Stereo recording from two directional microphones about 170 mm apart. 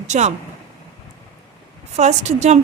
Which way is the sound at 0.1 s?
45° right (ahead or behind).